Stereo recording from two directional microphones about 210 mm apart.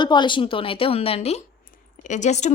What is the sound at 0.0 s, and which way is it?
A woman's voice, 20° left (ahead or behind).